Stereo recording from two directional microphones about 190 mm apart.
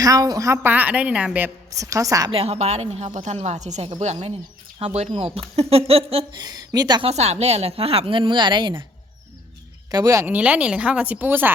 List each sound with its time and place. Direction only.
0.0 s a woman's voice: 20° right (ahead or behind)
1.7 s a woman's voice: 15° right (ahead or behind)
2.3 s a woman's voice: 35° right (ahead or behind)
6.4 s a woman's voice: 20° right (ahead or behind)
7.1 s a woman's voice: 35° right (ahead or behind)
9.9 s a woman's voice: 15° right (ahead or behind)